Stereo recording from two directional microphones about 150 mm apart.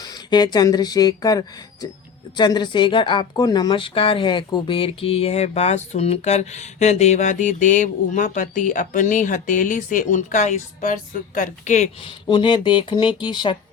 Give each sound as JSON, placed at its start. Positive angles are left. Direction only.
{"t": 0.0, "sound": "speech", "side_deg": 30}
{"t": 12.0, "sound": "speech", "side_deg": 35}